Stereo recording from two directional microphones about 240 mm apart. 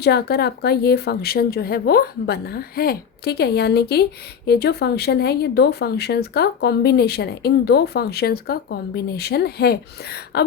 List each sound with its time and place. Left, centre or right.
0.0 s a woman's voice: left